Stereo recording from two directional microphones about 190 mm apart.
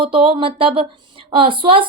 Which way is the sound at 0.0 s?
30° right (ahead or behind).